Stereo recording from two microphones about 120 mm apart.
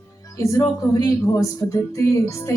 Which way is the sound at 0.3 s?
25° left (ahead or behind).